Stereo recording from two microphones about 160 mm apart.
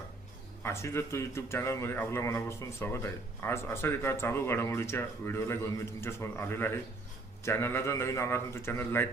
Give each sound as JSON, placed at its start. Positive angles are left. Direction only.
{"t": 0.6, "sound": "a man's voice", "side_deg": 15}